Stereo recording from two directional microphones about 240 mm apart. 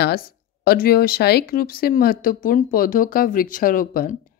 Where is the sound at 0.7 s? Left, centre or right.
Left.